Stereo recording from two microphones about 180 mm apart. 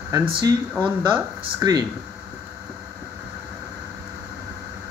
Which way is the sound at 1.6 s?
20° right (ahead or behind).